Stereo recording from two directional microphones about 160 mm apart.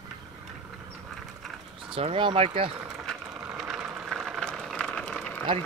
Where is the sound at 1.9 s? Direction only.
35° right (ahead or behind).